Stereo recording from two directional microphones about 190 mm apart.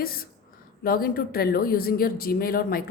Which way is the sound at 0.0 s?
50° left (ahead or behind).